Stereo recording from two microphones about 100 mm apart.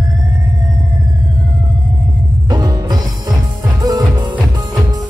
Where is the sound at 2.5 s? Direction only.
45° right (ahead or behind).